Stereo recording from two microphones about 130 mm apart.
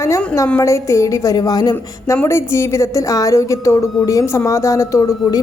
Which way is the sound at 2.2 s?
20° left (ahead or behind).